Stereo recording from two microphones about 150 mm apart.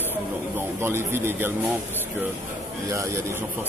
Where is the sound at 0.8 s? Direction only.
15° right (ahead or behind).